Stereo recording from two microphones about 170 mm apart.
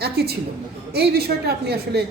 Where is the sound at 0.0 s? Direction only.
70° right (ahead or behind).